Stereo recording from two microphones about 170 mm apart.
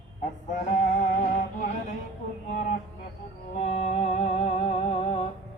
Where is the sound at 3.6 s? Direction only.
40° left (ahead or behind).